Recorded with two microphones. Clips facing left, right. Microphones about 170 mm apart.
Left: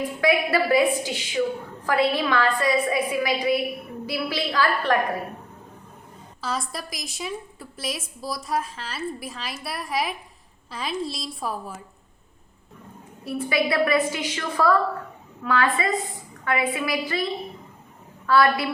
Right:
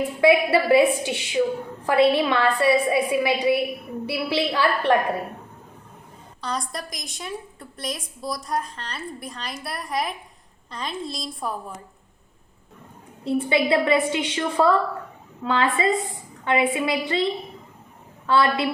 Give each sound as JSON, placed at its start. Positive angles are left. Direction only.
{"t": 0.2, "sound": "a woman's voice", "side_deg": -25}
{"t": 6.4, "sound": "a woman's voice", "side_deg": 5}
{"t": 13.2, "sound": "a woman's voice", "side_deg": -25}
{"t": 18.3, "sound": "a woman's voice", "side_deg": -25}